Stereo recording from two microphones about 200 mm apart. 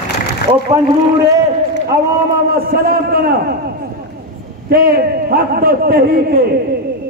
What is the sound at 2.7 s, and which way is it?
Speech, 50° right (ahead or behind).